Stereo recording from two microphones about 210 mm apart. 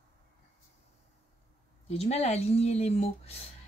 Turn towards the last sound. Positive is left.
turn(degrees=30)  # may be behind; listen again after turning